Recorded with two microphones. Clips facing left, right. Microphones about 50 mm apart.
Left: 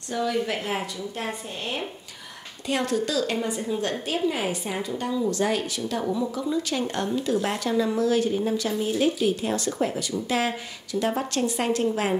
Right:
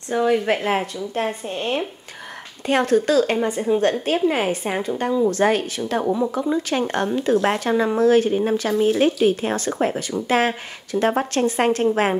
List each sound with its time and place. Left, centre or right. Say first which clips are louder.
0.1 s speech: right 7 dB; right